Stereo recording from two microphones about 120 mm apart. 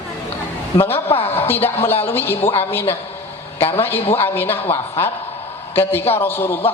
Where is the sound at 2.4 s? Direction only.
50° left (ahead or behind).